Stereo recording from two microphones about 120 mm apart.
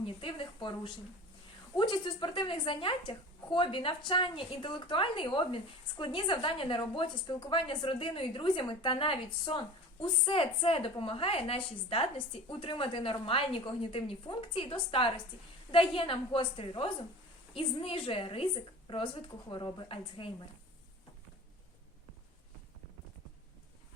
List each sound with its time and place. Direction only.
0.0 s a woman's voice: 45° left (ahead or behind)
1.7 s a woman's voice: 40° left (ahead or behind)